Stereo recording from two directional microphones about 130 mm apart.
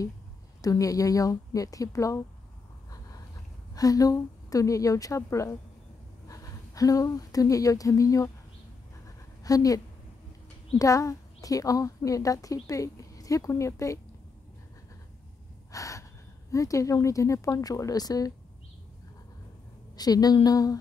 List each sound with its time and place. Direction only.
0.6 s a woman's voice: 25° left (ahead or behind)
3.7 s a woman's voice: 25° left (ahead or behind)
9.0 s a sound: 25° left (ahead or behind)
10.8 s a woman's voice: 25° left (ahead or behind)
15.7 s gasp: 25° left (ahead or behind)
16.5 s a woman's voice: 25° left (ahead or behind)
20.0 s a woman's voice: 30° left (ahead or behind)